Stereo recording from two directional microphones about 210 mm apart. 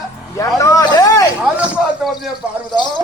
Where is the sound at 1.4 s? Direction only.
Centre (ahead or behind).